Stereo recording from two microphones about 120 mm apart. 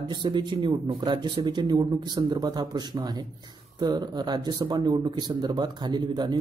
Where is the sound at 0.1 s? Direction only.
40° right (ahead or behind).